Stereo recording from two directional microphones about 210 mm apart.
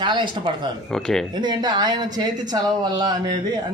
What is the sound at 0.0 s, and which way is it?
Speech, 20° right (ahead or behind).